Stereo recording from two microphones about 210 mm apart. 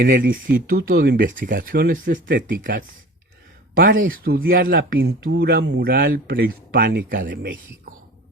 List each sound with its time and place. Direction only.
0.3 s speech: 40° right (ahead or behind)